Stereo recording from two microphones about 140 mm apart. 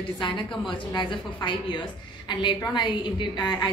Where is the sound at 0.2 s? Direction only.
35° left (ahead or behind).